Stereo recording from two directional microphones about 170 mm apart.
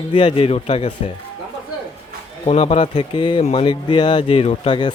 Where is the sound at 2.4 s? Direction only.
35° left (ahead or behind).